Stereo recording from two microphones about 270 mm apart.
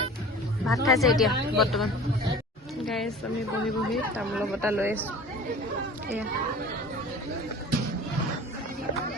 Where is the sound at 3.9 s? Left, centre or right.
Centre.